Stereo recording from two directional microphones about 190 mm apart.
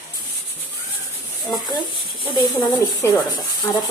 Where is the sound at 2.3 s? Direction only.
20° left (ahead or behind).